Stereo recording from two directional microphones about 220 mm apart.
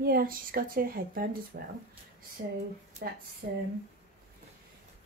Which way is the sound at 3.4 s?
45° right (ahead or behind).